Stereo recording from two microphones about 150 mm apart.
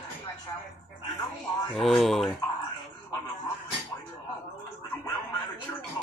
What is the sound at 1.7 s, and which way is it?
Speech, centre (ahead or behind).